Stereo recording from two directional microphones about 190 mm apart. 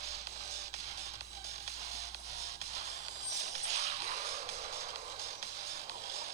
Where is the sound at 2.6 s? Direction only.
35° right (ahead or behind).